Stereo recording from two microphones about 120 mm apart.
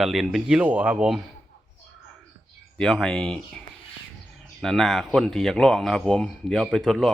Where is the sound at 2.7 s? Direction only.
5° left (ahead or behind).